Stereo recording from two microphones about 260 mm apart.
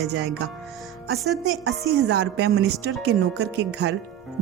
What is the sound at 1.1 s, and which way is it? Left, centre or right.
Speech, centre.